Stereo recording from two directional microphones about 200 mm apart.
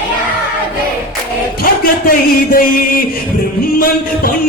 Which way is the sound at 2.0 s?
45° left (ahead or behind).